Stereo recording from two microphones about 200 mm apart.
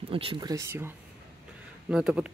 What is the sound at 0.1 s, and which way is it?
Speech, 25° right (ahead or behind).